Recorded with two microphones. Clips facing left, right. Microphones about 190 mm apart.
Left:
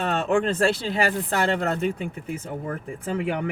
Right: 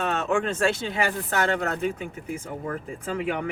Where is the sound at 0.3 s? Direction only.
35° left (ahead or behind).